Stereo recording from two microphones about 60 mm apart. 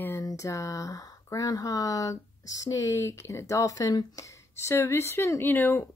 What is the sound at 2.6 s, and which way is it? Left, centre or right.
A woman's voice, left.